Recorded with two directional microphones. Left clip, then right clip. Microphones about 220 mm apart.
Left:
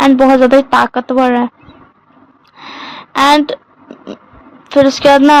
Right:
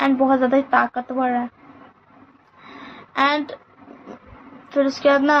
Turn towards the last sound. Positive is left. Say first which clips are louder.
# left 9 dB
turn(degrees=50)  # may be behind; listen again after turning